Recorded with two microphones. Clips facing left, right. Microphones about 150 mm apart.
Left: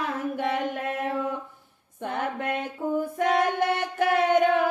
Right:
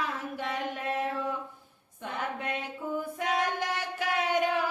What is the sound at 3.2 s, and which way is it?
Female singing, 55° left (ahead or behind).